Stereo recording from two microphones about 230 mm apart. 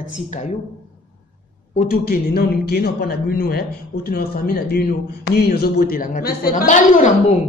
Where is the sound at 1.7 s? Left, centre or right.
Left.